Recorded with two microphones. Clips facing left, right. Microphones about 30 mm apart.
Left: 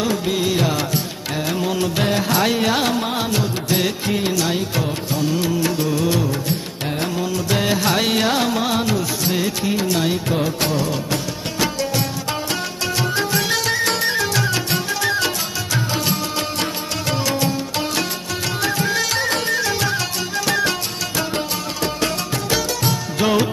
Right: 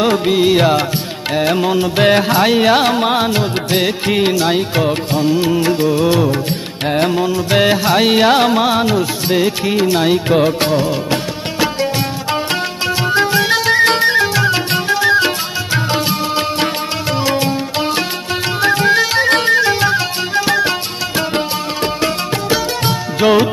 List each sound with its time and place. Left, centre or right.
0.3 s music: right
2.0 s music: right
2.2 s music: right
4.0 s music: right
4.3 s music: right
7.8 s music: right
8.3 s music: right
13.0 s music: right
17.2 s music: right
21.2 s music: right
22.0 s music: centre
22.9 s music: right